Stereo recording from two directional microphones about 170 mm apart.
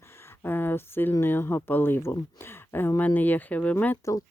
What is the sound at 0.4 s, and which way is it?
Speech, 10° left (ahead or behind).